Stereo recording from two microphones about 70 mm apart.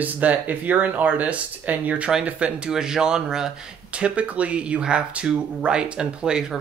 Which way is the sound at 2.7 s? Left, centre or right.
Centre.